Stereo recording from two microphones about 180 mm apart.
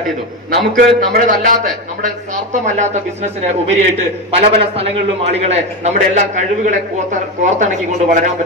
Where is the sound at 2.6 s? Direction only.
40° right (ahead or behind).